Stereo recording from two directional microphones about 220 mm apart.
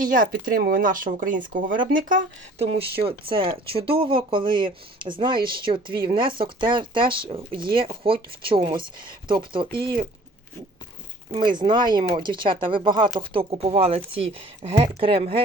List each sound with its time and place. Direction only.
0.0 s speech: 40° right (ahead or behind); by 9.6 s 20° right (ahead or behind)
11.3 s speech: 20° right (ahead or behind)